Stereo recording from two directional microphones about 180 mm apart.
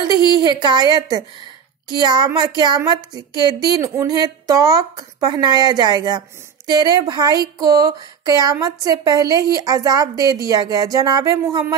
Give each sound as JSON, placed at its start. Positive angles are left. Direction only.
{"t": 0.0, "sound": "speech", "side_deg": -25}